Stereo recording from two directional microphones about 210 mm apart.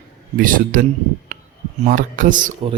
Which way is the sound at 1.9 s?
40° right (ahead or behind).